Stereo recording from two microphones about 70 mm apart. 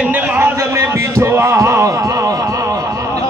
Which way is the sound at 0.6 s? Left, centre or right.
Right.